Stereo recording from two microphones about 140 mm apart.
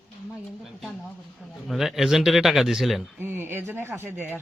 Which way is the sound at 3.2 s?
15° right (ahead or behind).